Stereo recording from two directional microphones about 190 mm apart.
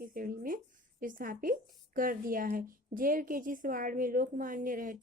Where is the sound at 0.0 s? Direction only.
50° right (ahead or behind).